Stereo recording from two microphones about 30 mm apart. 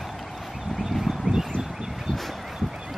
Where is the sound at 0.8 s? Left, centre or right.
Centre.